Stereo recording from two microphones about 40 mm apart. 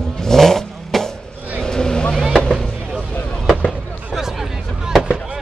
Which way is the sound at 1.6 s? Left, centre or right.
Centre.